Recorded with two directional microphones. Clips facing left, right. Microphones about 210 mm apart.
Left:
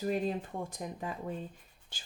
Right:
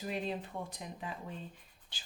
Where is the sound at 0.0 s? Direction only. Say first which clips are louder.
Left 5 dB; 45° left (ahead or behind).